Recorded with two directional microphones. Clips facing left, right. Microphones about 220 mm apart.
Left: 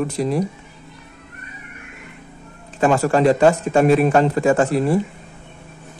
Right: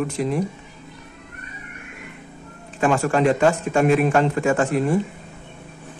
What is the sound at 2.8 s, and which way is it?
Speech, 35° left (ahead or behind).